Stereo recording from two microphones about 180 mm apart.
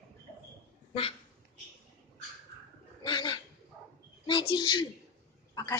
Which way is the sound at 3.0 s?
25° left (ahead or behind).